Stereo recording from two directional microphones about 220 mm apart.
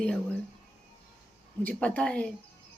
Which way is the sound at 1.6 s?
5° left (ahead or behind).